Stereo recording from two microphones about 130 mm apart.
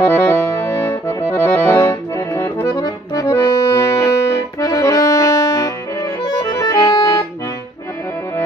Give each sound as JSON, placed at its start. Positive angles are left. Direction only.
{"t": 0.0, "sound": "accordion", "side_deg": 15}